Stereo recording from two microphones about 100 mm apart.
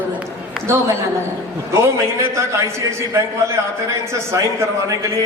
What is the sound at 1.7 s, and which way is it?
Speech, 30° right (ahead or behind).